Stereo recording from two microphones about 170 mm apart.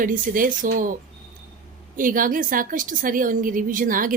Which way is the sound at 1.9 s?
55° right (ahead or behind).